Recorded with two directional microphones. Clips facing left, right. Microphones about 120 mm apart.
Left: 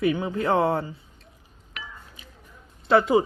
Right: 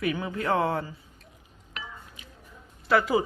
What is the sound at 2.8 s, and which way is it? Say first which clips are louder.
Speech: left 4 dB; 25° left (ahead or behind).